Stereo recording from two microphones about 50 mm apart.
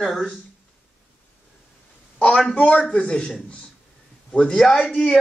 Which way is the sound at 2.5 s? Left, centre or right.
Left.